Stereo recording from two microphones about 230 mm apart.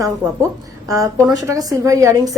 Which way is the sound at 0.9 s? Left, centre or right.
Centre.